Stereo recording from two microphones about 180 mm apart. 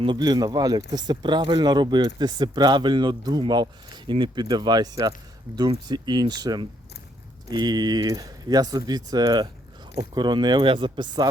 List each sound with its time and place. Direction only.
0.0 s speech: 25° right (ahead or behind)